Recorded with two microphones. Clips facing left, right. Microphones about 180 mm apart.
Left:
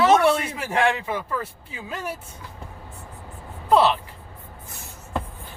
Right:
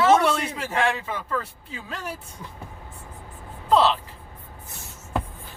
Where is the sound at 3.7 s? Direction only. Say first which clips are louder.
Left 1 dB; 10° left (ahead or behind).